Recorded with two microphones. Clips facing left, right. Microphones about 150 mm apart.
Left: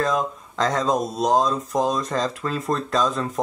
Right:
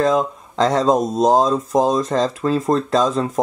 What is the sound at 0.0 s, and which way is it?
Speech, 30° right (ahead or behind).